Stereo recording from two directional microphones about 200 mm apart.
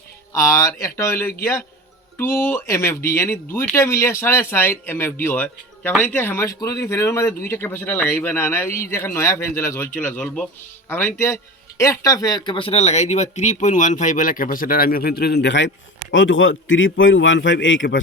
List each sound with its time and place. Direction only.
0.3 s speech: 15° left (ahead or behind); by 15.7 s 60° left (ahead or behind)
16.1 s a man's voice: 70° left (ahead or behind)